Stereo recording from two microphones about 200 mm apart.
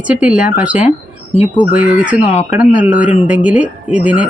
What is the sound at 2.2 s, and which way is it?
Speech, 35° left (ahead or behind).